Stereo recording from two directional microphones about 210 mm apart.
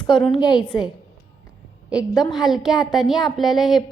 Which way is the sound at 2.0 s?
20° left (ahead or behind).